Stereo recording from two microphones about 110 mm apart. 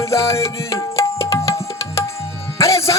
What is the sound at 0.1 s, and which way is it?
Tabla, 25° left (ahead or behind).